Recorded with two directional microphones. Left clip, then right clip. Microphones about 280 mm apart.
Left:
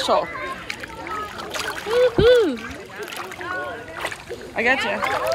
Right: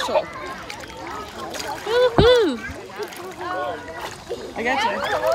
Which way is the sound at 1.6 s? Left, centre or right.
Centre.